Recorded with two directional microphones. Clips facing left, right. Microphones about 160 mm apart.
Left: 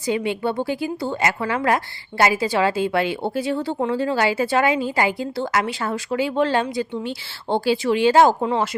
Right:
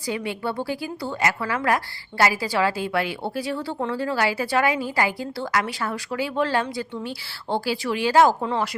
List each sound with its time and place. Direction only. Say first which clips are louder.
0.1 s a woman's voice: left 5 dB; 20° left (ahead or behind)